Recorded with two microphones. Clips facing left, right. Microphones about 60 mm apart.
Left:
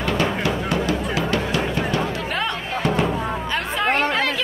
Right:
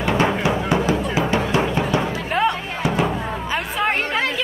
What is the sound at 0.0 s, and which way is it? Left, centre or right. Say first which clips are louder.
Music: right 3 dB; centre.